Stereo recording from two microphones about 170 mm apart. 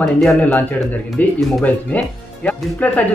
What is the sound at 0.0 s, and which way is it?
Speech, centre (ahead or behind).